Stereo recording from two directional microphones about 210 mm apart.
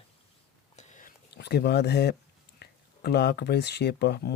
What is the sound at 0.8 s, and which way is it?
Whispering, 35° left (ahead or behind).